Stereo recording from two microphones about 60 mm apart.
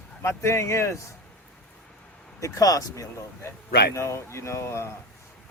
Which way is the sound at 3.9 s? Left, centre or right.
Left.